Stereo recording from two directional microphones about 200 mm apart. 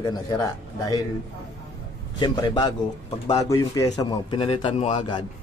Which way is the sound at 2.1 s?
20° left (ahead or behind).